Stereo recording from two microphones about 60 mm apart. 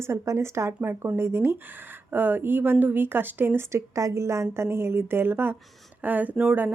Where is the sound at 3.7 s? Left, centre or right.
Right.